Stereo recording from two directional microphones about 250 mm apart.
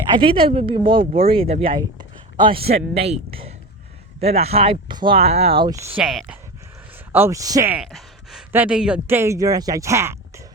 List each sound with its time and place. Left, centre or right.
0.2 s a man's voice: right